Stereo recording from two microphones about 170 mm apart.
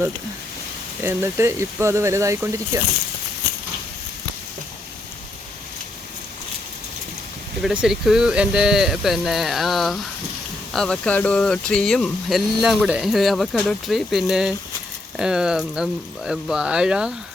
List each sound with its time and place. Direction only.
1.0 s speech: 15° right (ahead or behind)
7.6 s speech: 5° right (ahead or behind)